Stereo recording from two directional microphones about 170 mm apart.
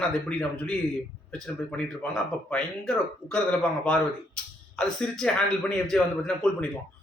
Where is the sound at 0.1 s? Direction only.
5° left (ahead or behind).